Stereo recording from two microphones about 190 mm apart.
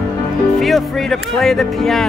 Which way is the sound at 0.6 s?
Centre (ahead or behind).